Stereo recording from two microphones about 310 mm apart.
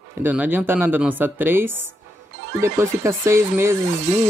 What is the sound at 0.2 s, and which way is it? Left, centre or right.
Speech, centre.